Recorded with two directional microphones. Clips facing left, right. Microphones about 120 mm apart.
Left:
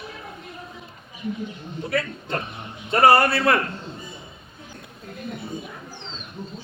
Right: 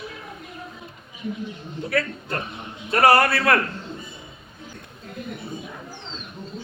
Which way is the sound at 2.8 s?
25° left (ahead or behind).